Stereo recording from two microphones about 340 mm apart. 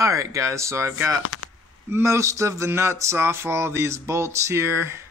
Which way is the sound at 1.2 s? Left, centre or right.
Left.